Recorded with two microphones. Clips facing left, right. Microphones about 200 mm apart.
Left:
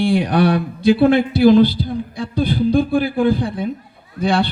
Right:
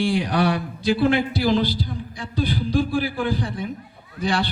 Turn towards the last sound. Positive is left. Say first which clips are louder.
# left 6 dB
turn(degrees=55)  # may be behind; listen again after turning